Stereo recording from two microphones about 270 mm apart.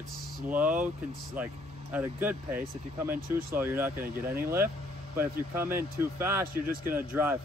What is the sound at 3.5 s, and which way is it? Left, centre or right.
Speech, centre.